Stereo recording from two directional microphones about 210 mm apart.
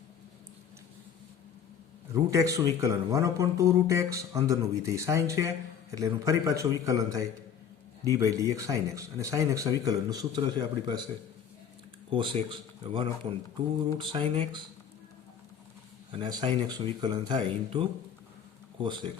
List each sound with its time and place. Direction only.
2.3 s speech: 15° right (ahead or behind)
12.1 s speech: 25° right (ahead or behind)
16.1 s speech: 20° right (ahead or behind)